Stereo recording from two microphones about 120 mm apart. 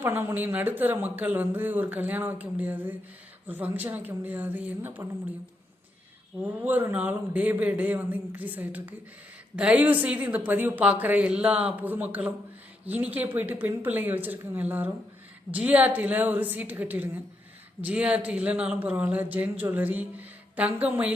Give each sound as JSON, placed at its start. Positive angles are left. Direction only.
{"t": 0.0, "sound": "speech", "side_deg": -20}
{"t": 6.4, "sound": "speech", "side_deg": -15}